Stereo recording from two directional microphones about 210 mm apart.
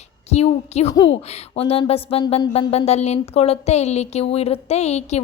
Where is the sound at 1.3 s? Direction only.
30° left (ahead or behind).